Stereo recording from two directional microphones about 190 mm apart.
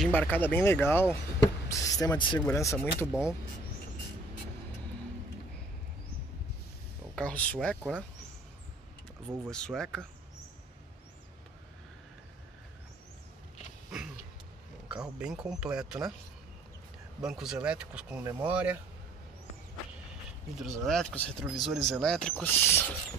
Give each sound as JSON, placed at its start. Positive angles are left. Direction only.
{"t": 0.0, "sound": "speech", "side_deg": 10}
{"t": 7.2, "sound": "speech", "side_deg": 5}
{"t": 9.5, "sound": "speech", "side_deg": 5}
{"t": 14.9, "sound": "speech", "side_deg": -5}
{"t": 17.2, "sound": "speech", "side_deg": -5}
{"t": 20.5, "sound": "speech", "side_deg": 0}